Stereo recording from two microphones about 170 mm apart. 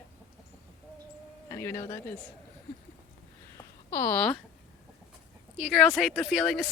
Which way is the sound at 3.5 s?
15° left (ahead or behind).